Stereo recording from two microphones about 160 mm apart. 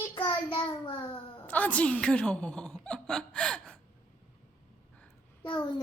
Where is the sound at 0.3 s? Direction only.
30° left (ahead or behind).